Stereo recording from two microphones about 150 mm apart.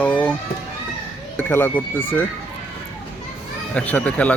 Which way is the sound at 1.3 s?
10° left (ahead or behind).